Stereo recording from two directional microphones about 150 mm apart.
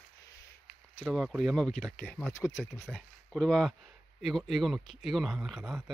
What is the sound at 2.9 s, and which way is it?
Speech, 5° left (ahead or behind).